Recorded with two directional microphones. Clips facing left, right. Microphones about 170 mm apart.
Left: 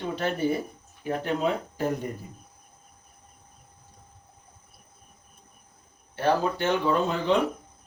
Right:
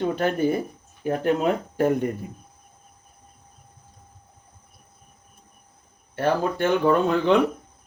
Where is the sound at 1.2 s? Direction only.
50° right (ahead or behind).